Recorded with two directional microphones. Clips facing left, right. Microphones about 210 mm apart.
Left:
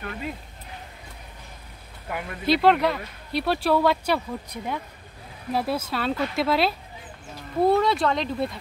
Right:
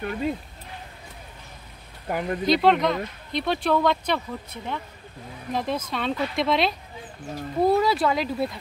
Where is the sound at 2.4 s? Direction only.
5° left (ahead or behind).